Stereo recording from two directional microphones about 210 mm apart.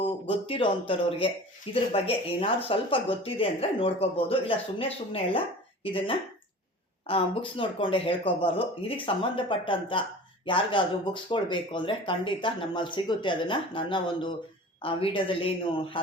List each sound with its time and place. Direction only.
0.3 s speech: 25° left (ahead or behind)